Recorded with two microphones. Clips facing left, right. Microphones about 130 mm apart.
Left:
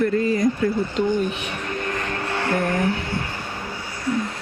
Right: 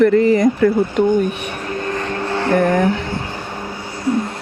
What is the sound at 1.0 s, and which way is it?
Speech, 55° right (ahead or behind).